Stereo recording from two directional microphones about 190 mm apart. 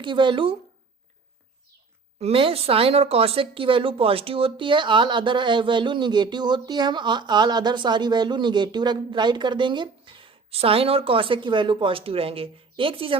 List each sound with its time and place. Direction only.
0.0 s speech: 25° right (ahead or behind)
2.1 s speech: 30° right (ahead or behind)